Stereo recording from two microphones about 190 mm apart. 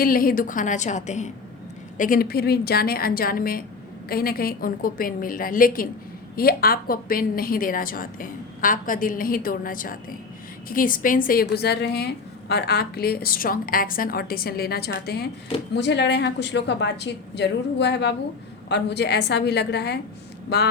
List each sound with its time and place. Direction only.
0.0 s a woman's voice: 50° left (ahead or behind)